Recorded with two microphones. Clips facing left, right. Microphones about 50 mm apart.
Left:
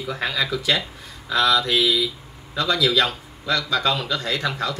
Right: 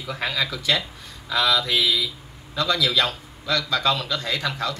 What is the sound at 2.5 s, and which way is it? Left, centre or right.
Speech, centre.